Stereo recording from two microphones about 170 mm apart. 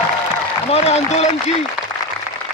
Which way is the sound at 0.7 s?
40° left (ahead or behind).